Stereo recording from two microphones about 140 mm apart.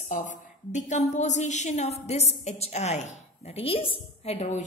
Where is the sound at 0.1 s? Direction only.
60° left (ahead or behind).